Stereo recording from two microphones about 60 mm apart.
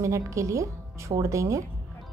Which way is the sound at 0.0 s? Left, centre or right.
Right.